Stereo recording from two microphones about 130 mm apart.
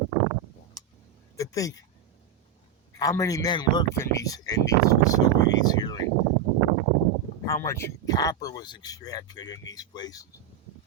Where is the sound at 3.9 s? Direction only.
20° left (ahead or behind).